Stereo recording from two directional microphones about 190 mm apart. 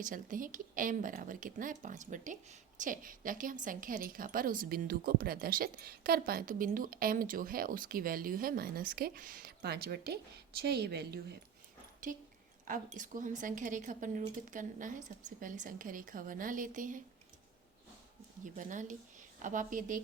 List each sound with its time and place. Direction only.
0.0 s a woman's voice: 45° right (ahead or behind)
12.1 s a woman's voice: 45° right (ahead or behind)
18.4 s a woman's voice: 45° right (ahead or behind)